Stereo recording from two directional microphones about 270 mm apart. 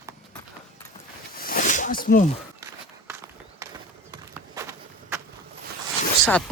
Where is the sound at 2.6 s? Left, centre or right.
Centre.